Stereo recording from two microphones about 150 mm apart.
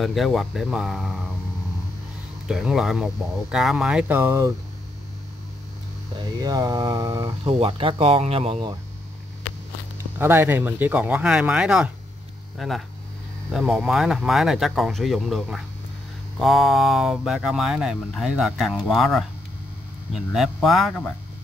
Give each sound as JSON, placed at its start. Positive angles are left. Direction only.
{"t": 0.0, "sound": "speech", "side_deg": 0}
{"t": 2.4, "sound": "speech", "side_deg": -5}
{"t": 6.4, "sound": "speech", "side_deg": -25}
{"t": 10.1, "sound": "speech", "side_deg": -15}